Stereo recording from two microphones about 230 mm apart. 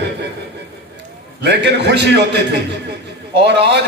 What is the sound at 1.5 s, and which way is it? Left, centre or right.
Speech, right.